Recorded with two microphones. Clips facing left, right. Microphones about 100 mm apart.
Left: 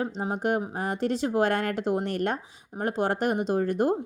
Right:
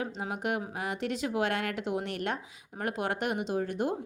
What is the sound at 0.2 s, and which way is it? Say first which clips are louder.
Speech: left 7 dB; 35° left (ahead or behind).